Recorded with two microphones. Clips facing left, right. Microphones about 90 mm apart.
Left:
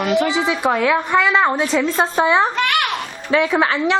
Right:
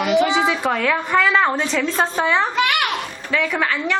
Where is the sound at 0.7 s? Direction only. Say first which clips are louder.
Left 2 dB; 10° left (ahead or behind).